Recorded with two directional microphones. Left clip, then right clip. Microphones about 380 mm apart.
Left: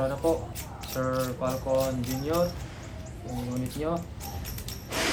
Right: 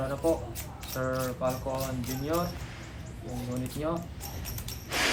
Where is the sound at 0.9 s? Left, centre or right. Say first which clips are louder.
Left 2 dB; centre.